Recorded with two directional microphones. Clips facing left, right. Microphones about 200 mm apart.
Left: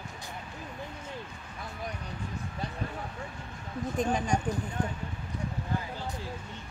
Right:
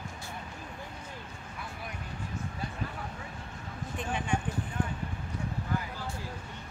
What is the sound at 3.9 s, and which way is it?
Speech, 40° left (ahead or behind).